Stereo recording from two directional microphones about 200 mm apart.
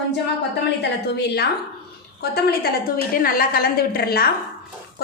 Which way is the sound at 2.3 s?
50° left (ahead or behind).